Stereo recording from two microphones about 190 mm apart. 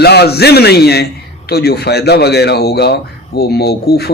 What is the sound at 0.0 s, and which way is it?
Speech, 60° left (ahead or behind).